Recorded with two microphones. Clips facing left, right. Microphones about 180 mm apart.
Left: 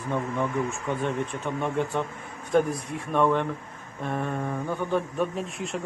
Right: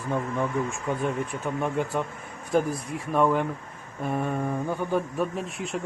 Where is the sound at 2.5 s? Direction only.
Centre (ahead or behind).